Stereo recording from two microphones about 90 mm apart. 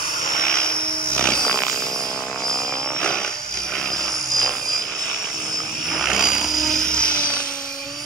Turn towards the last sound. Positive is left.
turn(degrees=10)  # may be behind; listen again after turning